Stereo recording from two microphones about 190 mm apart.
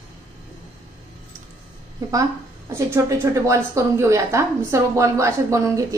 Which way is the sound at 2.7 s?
15° right (ahead or behind).